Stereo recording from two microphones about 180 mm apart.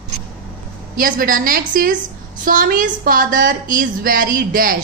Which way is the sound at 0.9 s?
50° right (ahead or behind).